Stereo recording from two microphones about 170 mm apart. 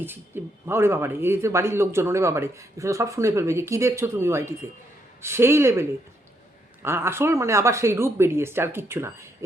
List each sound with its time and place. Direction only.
0.0 s speech: 15° right (ahead or behind)
6.8 s speech: 15° right (ahead or behind)